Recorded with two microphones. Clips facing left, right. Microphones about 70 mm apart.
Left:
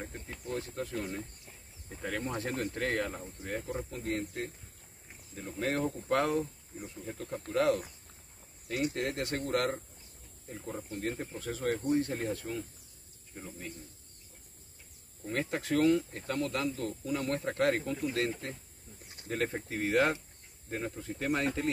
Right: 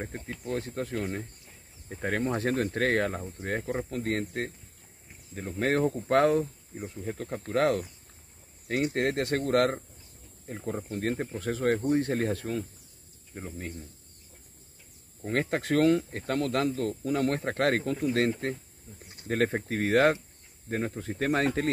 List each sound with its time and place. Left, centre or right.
0.1 s speech: right
3.4 s speech: right
10.6 s speech: right
10.9 s speech: right
13.3 s speech: right
15.2 s speech: right
20.7 s speech: right